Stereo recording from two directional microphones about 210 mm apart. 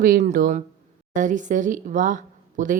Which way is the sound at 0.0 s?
40° right (ahead or behind).